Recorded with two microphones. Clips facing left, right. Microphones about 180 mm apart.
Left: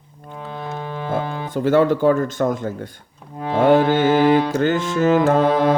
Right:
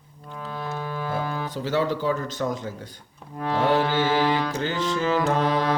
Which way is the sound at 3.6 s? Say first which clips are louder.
Left 8 dB; 50° left (ahead or behind).